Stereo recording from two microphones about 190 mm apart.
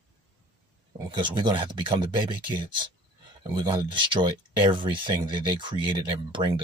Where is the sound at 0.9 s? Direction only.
25° right (ahead or behind).